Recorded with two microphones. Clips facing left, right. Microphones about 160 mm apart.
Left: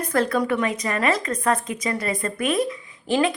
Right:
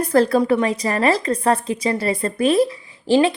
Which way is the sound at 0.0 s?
35° right (ahead or behind).